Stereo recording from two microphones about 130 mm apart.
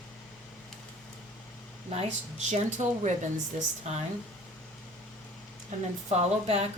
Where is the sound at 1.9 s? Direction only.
55° right (ahead or behind).